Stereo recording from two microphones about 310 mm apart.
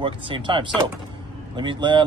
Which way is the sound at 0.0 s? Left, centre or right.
Centre.